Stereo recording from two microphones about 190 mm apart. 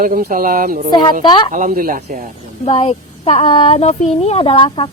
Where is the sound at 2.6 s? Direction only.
30° left (ahead or behind).